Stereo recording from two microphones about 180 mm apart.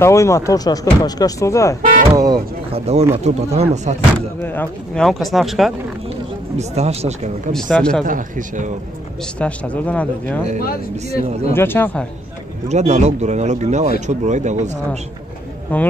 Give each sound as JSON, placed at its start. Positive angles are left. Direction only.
{"t": 0.0, "sound": "speech", "side_deg": 15}
{"t": 2.1, "sound": "speech", "side_deg": -20}
{"t": 2.7, "sound": "speech", "side_deg": -35}
{"t": 4.4, "sound": "speech", "side_deg": 10}
{"t": 6.5, "sound": "speech", "side_deg": -40}
{"t": 7.5, "sound": "speech", "side_deg": 5}
{"t": 8.0, "sound": "a man's voice", "side_deg": -50}
{"t": 9.4, "sound": "speech", "side_deg": 5}
{"t": 10.6, "sound": "speech", "side_deg": 55}
{"t": 11.5, "sound": "speech", "side_deg": 10}
{"t": 12.6, "sound": "speech", "side_deg": -40}
{"t": 15.7, "sound": "speech", "side_deg": 10}